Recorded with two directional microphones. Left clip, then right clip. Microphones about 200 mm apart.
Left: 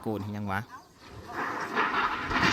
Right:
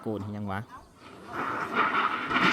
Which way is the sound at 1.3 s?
15° right (ahead or behind).